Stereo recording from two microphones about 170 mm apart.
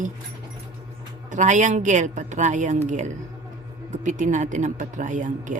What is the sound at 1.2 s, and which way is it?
Speech, 45° right (ahead or behind).